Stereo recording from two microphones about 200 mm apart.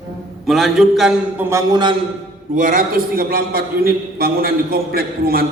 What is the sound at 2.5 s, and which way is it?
A man's voice, 40° right (ahead or behind).